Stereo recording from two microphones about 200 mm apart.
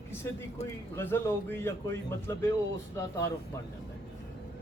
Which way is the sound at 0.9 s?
10° left (ahead or behind).